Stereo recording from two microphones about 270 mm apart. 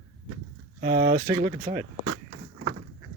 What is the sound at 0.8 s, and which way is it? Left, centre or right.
Speech, right.